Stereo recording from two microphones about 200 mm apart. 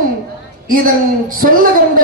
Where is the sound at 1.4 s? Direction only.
45° right (ahead or behind).